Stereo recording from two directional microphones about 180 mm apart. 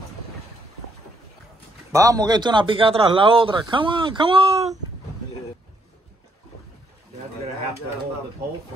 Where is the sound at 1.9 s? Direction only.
20° right (ahead or behind); by 4.7 s 35° right (ahead or behind).